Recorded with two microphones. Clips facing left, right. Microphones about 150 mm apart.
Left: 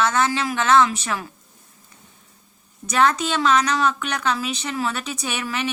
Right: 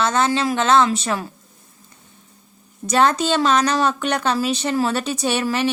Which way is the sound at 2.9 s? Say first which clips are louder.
Right 3 dB; 35° right (ahead or behind).